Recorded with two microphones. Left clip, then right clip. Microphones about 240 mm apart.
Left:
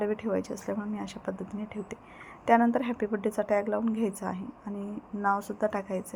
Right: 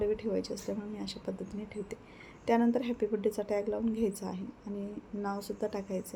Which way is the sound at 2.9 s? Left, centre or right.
Centre.